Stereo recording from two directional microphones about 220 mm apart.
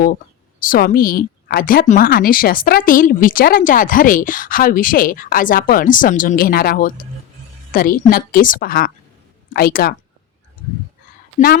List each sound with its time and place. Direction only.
0.6 s speech: 40° left (ahead or behind)
11.3 s a woman's voice: 40° left (ahead or behind)